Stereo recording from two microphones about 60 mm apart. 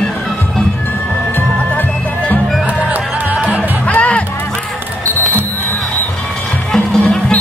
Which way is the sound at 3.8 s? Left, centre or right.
Left.